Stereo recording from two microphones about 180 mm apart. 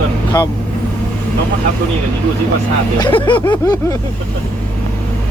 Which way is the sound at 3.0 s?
30° left (ahead or behind).